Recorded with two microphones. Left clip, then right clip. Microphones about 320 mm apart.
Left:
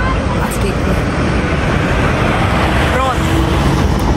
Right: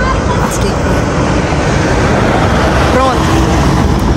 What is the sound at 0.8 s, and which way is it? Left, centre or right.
Vehicle, right.